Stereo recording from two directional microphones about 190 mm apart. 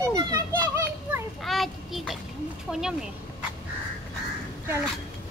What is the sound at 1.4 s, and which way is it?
A child's voice, centre (ahead or behind).